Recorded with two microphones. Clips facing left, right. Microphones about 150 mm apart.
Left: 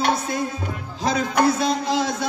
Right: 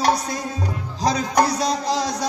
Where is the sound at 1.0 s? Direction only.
40° right (ahead or behind).